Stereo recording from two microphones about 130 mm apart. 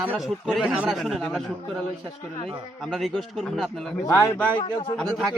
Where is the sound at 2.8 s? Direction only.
Centre (ahead or behind).